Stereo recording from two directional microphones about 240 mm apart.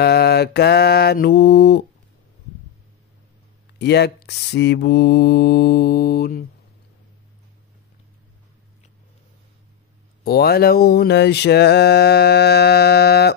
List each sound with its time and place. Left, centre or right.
0.0 s mantra: left
3.7 s mantra: left
10.2 s mantra: left